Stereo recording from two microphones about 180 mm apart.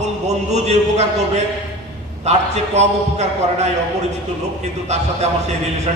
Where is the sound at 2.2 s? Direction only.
40° right (ahead or behind).